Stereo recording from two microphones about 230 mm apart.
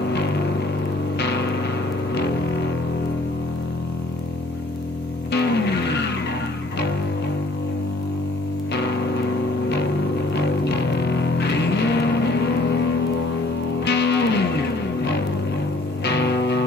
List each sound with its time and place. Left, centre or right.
1.2 s music: left
5.3 s music: left
8.7 s music: left
10.3 s music: left
13.8 s music: left
16.0 s music: left